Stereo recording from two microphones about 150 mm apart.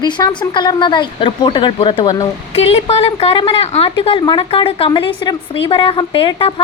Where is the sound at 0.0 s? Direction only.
30° left (ahead or behind).